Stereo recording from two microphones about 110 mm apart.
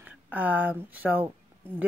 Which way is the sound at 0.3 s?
15° right (ahead or behind).